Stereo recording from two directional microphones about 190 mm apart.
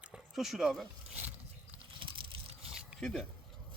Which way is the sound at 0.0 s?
5° right (ahead or behind).